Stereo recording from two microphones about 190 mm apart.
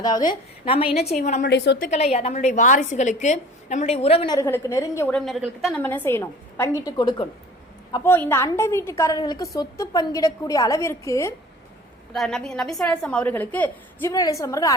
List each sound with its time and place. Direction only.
0.0 s a woman's voice: 20° left (ahead or behind); by 1.5 s 40° left (ahead or behind)
1.5 s a woman's voice: 65° left (ahead or behind)
1.8 s a woman's voice: 35° left (ahead or behind)
4.4 s a woman's voice: 15° left (ahead or behind)
5.1 s a woman's voice: centre (ahead or behind)
5.8 s a woman's voice: 10° left (ahead or behind)
12.1 s a woman's voice: centre (ahead or behind); by 14.8 s 20° left (ahead or behind)